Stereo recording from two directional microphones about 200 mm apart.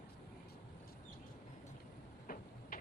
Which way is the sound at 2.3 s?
45° left (ahead or behind).